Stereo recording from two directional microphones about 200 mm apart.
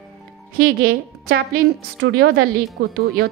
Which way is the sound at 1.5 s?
60° right (ahead or behind).